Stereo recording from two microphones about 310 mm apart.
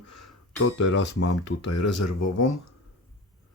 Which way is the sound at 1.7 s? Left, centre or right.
Left.